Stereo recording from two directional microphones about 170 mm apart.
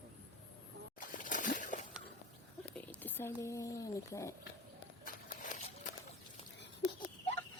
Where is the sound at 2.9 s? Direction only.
10° left (ahead or behind).